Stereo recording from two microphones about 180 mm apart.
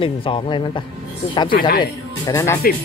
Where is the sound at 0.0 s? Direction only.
30° left (ahead or behind).